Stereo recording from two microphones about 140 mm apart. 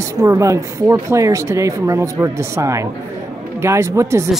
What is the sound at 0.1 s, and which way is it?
Speech, 25° right (ahead or behind).